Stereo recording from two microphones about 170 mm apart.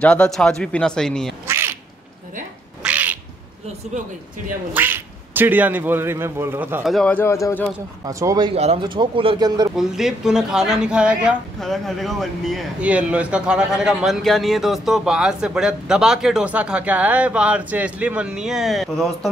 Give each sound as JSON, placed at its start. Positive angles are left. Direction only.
{"t": 0.0, "sound": "speech", "side_deg": 5}
{"t": 1.5, "sound": "quack", "side_deg": -15}
{"t": 2.8, "sound": "cat", "side_deg": -10}
{"t": 3.9, "sound": "a man's voice", "side_deg": -40}
{"t": 4.7, "sound": "speech", "side_deg": -10}
{"t": 8.0, "sound": "speech", "side_deg": -20}
{"t": 8.5, "sound": "speech", "side_deg": -35}
{"t": 9.8, "sound": "speech", "side_deg": 0}